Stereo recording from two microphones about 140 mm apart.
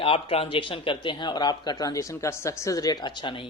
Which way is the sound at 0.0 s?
40° left (ahead or behind).